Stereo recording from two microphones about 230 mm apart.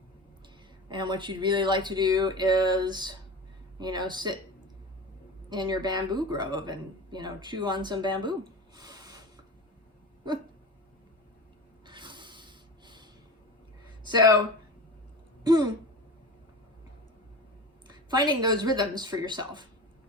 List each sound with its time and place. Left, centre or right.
0.9 s speech: centre
5.5 s speech: centre
10.3 s speech: centre
11.9 s snort: centre
15.4 s speech: centre
17.8 s speech: centre